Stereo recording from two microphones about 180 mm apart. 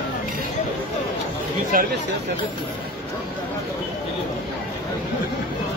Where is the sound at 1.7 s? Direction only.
50° right (ahead or behind).